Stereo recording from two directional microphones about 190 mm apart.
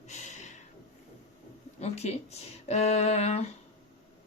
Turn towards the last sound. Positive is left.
turn(degrees=35)  # may be behind; listen again after turning